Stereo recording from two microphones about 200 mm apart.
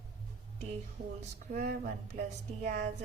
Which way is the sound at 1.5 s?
40° right (ahead or behind).